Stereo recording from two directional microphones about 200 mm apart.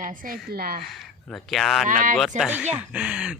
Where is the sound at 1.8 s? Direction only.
40° right (ahead or behind).